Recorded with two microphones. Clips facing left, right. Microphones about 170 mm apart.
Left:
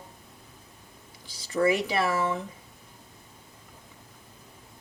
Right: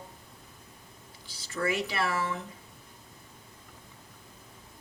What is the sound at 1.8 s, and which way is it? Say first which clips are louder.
Speech: left 5 dB; 20° left (ahead or behind).